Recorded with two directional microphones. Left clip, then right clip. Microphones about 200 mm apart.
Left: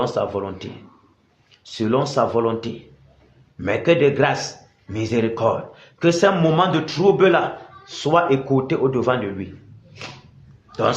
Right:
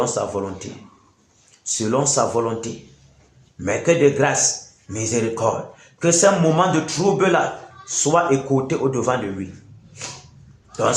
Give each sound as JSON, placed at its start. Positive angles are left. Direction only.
{"t": 0.0, "sound": "speech", "side_deg": 45}
{"t": 1.6, "sound": "speech", "side_deg": 45}